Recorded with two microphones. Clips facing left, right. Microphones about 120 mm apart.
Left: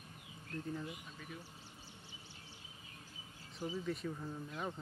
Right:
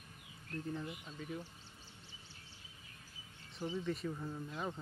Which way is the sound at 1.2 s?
35° right (ahead or behind).